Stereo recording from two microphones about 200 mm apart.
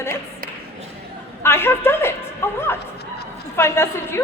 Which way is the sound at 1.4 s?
10° left (ahead or behind).